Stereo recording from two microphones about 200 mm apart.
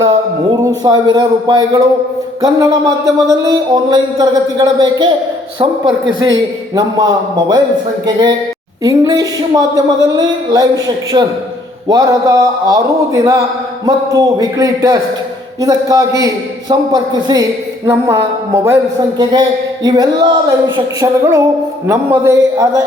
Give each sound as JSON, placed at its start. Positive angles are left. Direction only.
{"t": 0.9, "sound": "speech", "side_deg": -20}
{"t": 6.1, "sound": "a man's voice", "side_deg": -70}
{"t": 6.7, "sound": "a man's voice", "side_deg": -20}